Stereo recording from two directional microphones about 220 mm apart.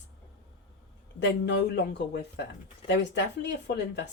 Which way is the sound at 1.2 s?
55° left (ahead or behind).